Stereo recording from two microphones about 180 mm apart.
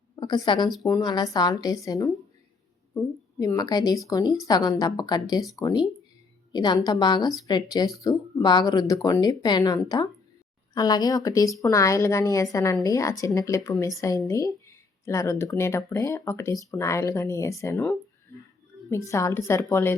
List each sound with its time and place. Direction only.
0.2 s a woman's voice: 25° left (ahead or behind)